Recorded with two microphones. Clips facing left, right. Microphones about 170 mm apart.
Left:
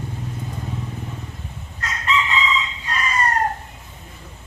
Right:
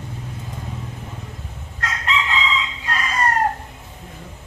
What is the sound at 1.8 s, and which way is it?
Crowing, 90° right.